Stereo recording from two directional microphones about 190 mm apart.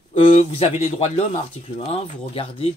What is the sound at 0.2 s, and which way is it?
Speech, 40° left (ahead or behind).